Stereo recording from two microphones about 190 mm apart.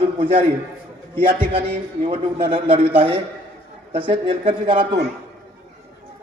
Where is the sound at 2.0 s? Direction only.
25° right (ahead or behind).